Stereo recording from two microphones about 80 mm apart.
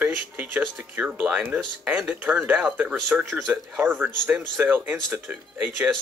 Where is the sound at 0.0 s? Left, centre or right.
Centre.